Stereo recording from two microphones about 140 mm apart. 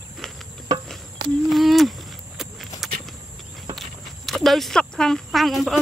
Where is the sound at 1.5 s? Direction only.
Centre (ahead or behind).